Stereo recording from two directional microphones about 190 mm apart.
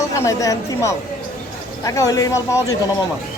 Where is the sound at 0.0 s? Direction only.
15° left (ahead or behind).